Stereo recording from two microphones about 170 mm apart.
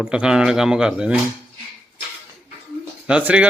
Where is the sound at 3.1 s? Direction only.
10° right (ahead or behind).